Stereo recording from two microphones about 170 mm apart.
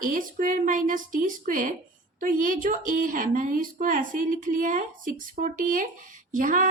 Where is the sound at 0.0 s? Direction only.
55° right (ahead or behind).